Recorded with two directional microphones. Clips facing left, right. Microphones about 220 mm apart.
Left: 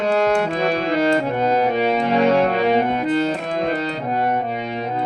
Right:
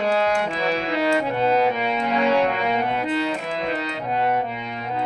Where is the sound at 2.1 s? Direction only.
40° left (ahead or behind).